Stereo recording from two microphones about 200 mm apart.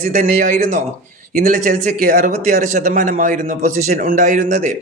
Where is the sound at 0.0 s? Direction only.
40° right (ahead or behind).